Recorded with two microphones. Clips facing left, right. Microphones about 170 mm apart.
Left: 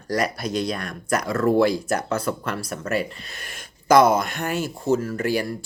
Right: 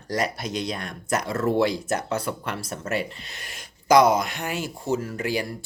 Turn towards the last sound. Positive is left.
turn(degrees=-15)  # may be behind; listen again after turning